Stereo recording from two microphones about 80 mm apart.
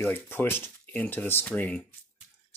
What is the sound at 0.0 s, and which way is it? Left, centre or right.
Speech, left.